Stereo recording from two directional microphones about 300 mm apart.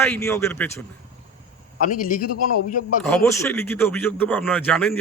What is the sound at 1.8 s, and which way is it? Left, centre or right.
Speech, left.